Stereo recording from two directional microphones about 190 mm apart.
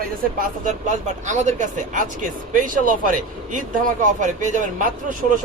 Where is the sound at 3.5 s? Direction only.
45° right (ahead or behind).